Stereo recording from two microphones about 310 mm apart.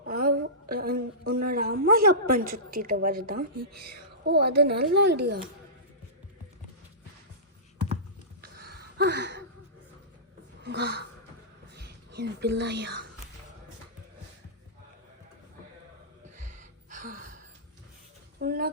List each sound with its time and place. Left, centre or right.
0.1 s a woman's voice: right
8.4 s a sound: right
10.6 s speech: right
16.4 s gasp: right
18.3 s speech: right